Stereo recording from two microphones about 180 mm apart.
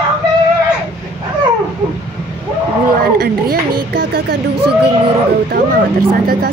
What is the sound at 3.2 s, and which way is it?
Speech, 60° right (ahead or behind).